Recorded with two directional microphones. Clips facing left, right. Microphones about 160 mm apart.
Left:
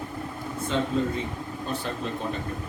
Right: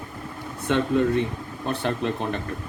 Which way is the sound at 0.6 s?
65° right (ahead or behind).